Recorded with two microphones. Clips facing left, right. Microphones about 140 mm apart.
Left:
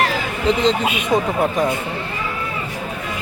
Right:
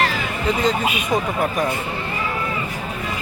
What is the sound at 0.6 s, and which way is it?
Speech, 25° left (ahead or behind).